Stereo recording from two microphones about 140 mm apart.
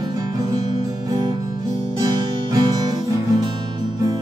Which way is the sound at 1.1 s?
30° right (ahead or behind).